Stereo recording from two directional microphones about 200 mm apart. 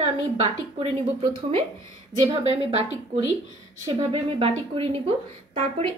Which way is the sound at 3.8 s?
30° right (ahead or behind).